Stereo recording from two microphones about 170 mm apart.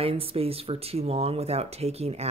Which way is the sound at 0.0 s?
35° right (ahead or behind).